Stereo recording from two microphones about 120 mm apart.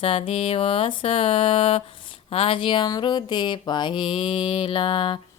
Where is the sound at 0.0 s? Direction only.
50° left (ahead or behind).